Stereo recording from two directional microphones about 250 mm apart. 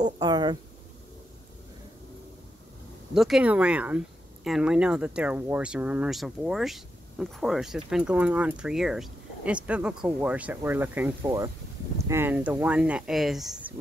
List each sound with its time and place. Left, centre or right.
0.2 s speech: centre
3.2 s speech: centre